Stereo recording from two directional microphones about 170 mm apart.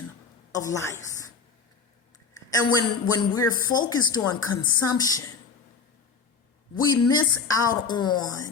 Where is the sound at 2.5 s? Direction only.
25° left (ahead or behind).